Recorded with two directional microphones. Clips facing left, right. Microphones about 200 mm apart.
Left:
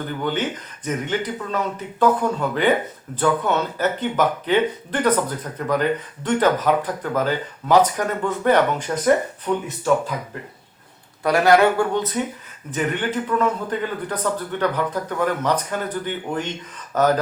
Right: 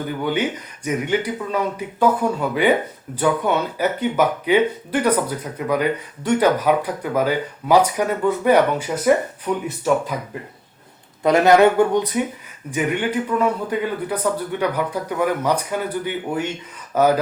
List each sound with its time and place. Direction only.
0.3 s speech: 10° right (ahead or behind)
11.2 s speech: 20° right (ahead or behind)